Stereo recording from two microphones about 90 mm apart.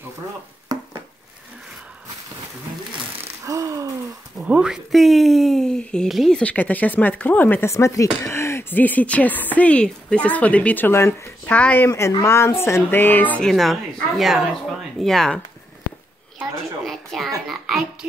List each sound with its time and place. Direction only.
3.4 s gasp: 35° right (ahead or behind)
4.4 s speech: 10° right (ahead or behind)
6.3 s speech: 15° left (ahead or behind)
7.7 s speech: 35° left (ahead or behind)
11.4 s speech: 15° left (ahead or behind)
12.3 s speech: 30° left (ahead or behind)
13.4 s speech: centre (ahead or behind)
16.8 s speech: 5° left (ahead or behind)